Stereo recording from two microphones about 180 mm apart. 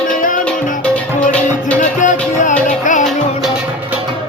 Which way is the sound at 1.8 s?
45° left (ahead or behind).